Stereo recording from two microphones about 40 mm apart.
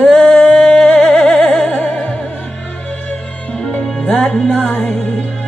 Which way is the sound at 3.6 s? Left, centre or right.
Left.